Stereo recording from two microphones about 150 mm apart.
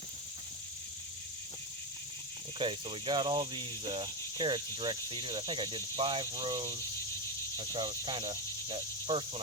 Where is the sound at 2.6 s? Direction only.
35° right (ahead or behind).